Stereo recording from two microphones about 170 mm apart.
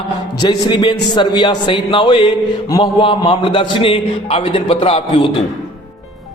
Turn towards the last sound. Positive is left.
turn(degrees=35)  # may be behind; listen again after turning